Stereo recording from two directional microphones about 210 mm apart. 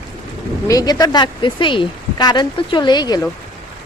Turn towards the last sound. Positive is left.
turn(degrees=20)  # may be behind; listen again after turning